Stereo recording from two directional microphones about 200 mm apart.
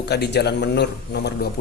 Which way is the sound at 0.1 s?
55° left (ahead or behind).